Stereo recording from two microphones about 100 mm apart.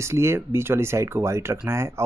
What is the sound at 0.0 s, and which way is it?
Speech, 25° right (ahead or behind).